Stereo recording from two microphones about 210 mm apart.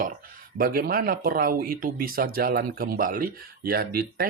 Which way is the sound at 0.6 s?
45° right (ahead or behind).